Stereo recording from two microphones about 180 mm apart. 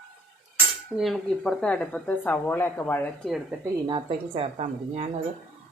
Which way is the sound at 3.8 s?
30° right (ahead or behind).